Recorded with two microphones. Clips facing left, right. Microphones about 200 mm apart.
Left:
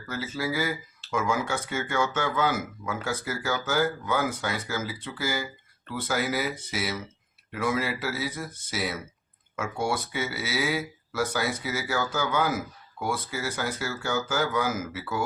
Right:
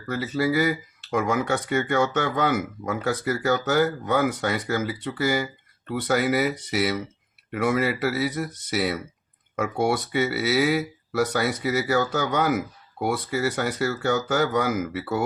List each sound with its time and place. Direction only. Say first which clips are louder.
0.3 s speech: right 7 dB; 65° right (ahead or behind)